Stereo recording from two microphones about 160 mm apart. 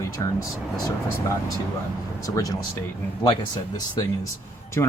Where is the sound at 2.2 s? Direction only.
20° left (ahead or behind).